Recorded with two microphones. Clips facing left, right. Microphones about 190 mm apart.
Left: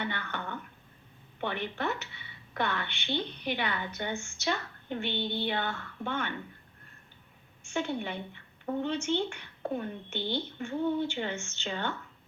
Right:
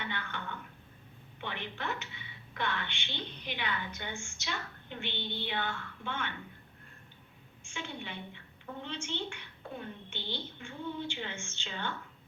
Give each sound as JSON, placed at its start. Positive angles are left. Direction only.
{"t": 0.1, "sound": "a sound", "side_deg": 40}
{"t": 1.4, "sound": "a woman's voice", "side_deg": 50}
{"t": 7.7, "sound": "a woman's voice", "side_deg": 45}